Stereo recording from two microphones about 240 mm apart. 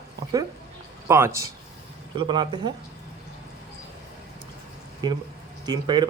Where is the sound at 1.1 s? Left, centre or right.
Centre.